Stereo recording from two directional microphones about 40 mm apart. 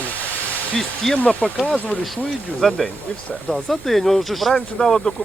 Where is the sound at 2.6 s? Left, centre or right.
Centre.